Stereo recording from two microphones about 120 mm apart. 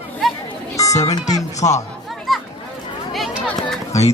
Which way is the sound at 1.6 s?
75° left (ahead or behind).